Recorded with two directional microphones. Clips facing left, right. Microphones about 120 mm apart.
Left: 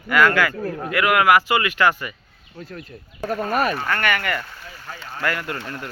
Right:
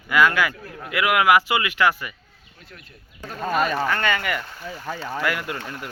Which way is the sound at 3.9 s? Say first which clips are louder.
Left 1 dB; 20° right (ahead or behind).